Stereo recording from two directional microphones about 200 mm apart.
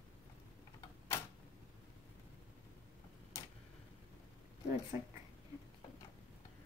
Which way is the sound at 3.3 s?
15° left (ahead or behind).